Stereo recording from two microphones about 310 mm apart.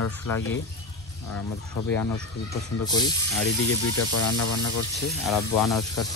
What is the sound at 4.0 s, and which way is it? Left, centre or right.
Speech, left.